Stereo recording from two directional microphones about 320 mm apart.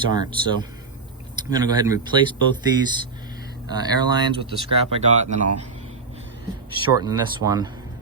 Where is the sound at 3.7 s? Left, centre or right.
Centre.